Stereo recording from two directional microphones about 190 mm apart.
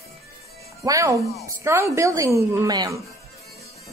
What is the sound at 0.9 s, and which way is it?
A woman's voice, 15° right (ahead or behind).